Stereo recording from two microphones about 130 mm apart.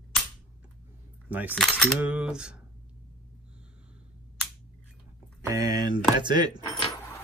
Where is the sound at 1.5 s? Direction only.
Centre (ahead or behind).